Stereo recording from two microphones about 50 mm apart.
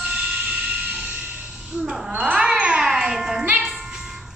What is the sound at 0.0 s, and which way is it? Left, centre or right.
Vehicle, centre.